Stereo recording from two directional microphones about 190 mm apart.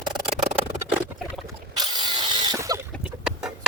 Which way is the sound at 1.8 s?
25° right (ahead or behind).